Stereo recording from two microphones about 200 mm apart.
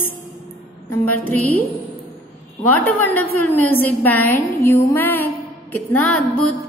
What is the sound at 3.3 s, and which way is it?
A woman's voice, 10° left (ahead or behind).